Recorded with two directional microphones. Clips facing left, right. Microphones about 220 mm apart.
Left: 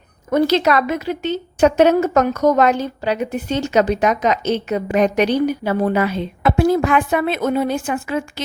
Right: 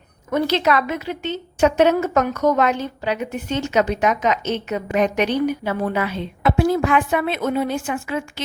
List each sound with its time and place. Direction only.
0.3 s a woman's voice: 40° left (ahead or behind)